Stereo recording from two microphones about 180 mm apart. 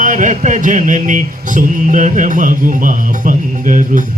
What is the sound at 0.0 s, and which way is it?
Music, 45° right (ahead or behind).